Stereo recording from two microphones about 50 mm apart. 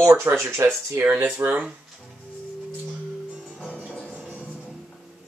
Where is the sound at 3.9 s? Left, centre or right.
Left.